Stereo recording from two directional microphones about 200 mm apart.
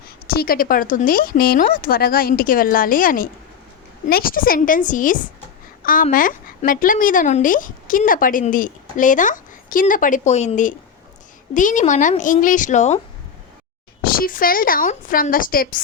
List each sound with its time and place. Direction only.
0.3 s a woman's voice: 50° left (ahead or behind)
14.0 s a woman's voice: 45° left (ahead or behind)